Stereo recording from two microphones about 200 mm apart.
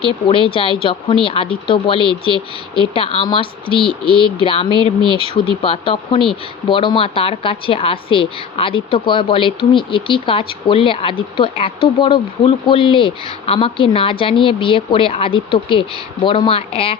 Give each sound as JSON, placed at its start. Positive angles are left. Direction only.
{"t": 0.0, "sound": "speech", "side_deg": 25}